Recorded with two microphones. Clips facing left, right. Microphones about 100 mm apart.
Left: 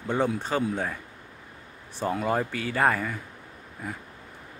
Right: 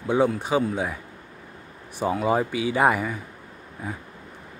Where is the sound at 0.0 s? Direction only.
10° right (ahead or behind).